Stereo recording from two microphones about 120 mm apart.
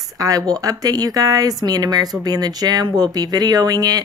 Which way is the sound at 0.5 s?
30° right (ahead or behind).